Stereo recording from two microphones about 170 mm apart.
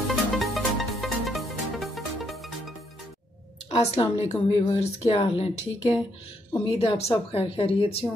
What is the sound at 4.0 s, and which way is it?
A woman's voice, 35° left (ahead or behind).